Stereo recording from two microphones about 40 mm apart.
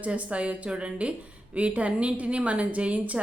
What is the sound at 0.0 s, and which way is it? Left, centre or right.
Speech, right.